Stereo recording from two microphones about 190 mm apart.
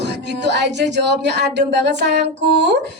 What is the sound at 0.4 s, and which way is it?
Speech, 65° right (ahead or behind).